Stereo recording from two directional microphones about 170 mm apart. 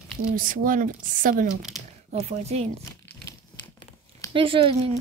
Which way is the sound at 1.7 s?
Centre (ahead or behind).